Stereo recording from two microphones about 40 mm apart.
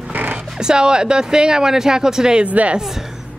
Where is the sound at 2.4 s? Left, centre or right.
Right.